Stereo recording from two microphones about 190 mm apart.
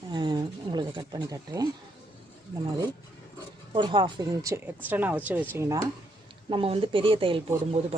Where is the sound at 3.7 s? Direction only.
25° right (ahead or behind).